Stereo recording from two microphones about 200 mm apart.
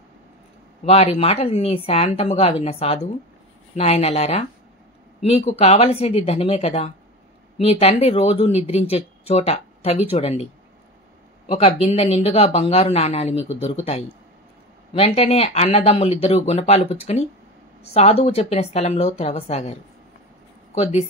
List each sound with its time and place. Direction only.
0.8 s speech: 30° left (ahead or behind)
15.0 s speech: 30° left (ahead or behind)